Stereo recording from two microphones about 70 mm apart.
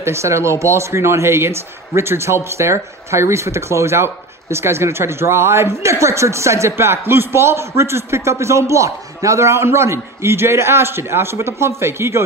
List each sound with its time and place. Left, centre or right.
0.0 s speech: right